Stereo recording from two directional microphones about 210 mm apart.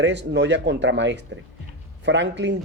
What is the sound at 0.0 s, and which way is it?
Speech, 55° right (ahead or behind).